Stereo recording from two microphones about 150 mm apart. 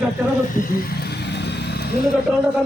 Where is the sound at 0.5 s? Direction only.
80° left.